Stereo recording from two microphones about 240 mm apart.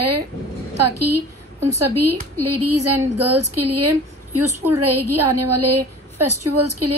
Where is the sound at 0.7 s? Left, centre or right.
Right.